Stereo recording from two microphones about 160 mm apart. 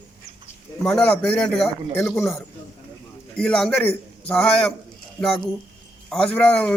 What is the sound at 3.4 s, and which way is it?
A man's voice, 5° left (ahead or behind).